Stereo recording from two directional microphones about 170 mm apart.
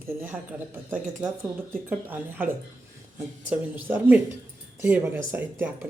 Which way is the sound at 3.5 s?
10° right (ahead or behind).